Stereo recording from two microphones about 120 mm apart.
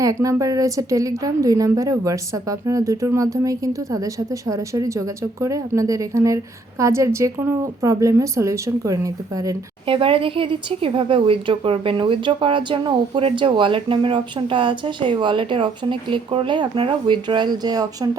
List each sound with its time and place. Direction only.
0.0 s a woman's voice: 30° right (ahead or behind)
9.8 s speech: 45° right (ahead or behind)